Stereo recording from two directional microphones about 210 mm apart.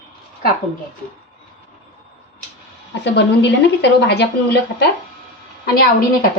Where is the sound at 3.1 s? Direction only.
55° left (ahead or behind).